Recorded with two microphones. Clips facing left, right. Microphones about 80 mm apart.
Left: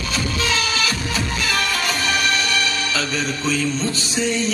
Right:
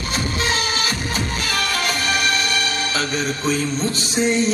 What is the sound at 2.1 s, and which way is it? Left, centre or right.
Music, right.